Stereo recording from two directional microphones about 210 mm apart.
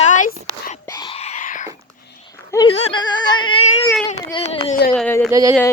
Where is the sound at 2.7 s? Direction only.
30° left (ahead or behind).